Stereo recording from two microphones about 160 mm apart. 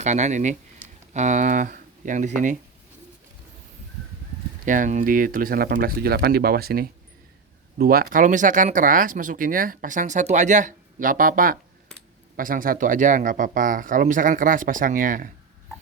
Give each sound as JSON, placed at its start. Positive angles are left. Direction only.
{"t": 0.0, "sound": "speech", "side_deg": -45}
{"t": 4.6, "sound": "speech", "side_deg": -55}